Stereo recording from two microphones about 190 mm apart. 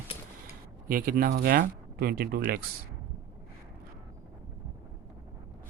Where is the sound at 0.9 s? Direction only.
50° right (ahead or behind).